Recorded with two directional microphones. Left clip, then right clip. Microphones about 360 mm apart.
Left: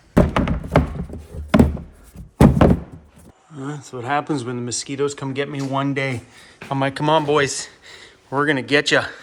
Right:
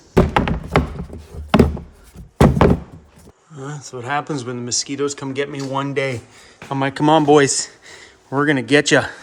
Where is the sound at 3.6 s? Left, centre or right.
Centre; by 9.0 s right.